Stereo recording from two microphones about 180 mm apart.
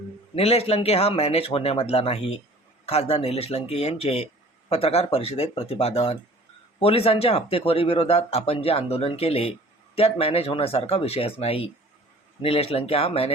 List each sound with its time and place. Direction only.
0.3 s speech: 35° left (ahead or behind)